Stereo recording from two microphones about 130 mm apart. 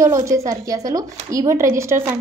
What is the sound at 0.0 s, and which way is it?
A woman's voice, 25° right (ahead or behind).